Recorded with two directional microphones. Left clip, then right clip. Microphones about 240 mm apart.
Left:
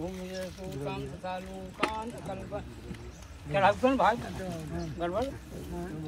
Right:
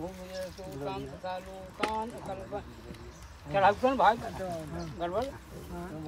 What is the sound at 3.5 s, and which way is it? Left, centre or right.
Speech, right.